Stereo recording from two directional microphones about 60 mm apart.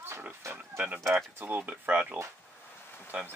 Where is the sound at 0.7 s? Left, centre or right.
Right.